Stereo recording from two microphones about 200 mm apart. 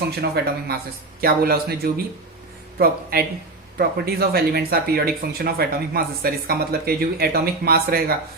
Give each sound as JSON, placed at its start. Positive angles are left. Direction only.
{"t": 0.2, "sound": "speech", "side_deg": -55}